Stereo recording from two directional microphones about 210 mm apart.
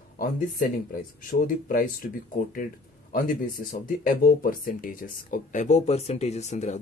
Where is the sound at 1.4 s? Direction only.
40° left (ahead or behind).